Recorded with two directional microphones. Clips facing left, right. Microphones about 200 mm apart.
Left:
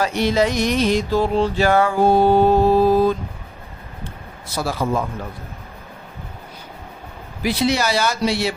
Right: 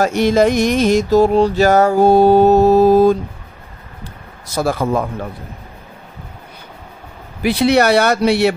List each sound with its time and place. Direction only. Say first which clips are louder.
0.0 s music: right 5 dB; 45° right (ahead or behind)
4.6 s music: right 5 dB; 55° right (ahead or behind)
7.4 s speech: right 7 dB; 60° right (ahead or behind)